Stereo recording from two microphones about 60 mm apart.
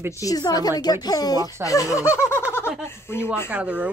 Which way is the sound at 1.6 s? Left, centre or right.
Left.